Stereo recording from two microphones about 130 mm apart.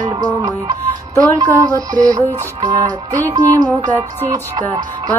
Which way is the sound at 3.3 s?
30° right (ahead or behind).